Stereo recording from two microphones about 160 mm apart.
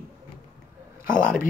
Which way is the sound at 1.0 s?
60° left (ahead or behind).